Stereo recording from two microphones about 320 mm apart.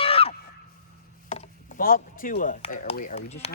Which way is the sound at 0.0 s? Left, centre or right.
Centre.